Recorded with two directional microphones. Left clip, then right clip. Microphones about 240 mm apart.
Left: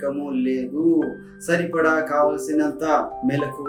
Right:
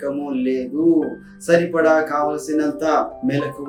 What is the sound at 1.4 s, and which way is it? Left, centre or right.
Speech, centre.